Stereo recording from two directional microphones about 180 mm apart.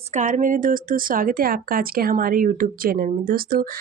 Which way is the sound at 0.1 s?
40° right (ahead or behind).